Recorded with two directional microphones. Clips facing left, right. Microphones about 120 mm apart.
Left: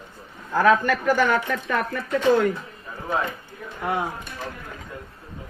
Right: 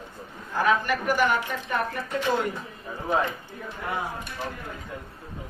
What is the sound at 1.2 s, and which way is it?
Speech, 90° left.